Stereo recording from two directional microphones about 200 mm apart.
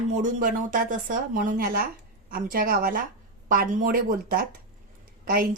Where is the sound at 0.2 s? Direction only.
40° right (ahead or behind).